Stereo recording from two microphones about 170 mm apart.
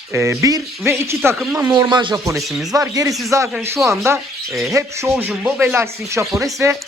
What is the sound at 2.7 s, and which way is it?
Speech, 20° right (ahead or behind).